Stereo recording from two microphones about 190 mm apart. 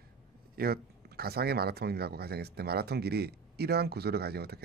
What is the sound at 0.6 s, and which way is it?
Speech, 55° right (ahead or behind).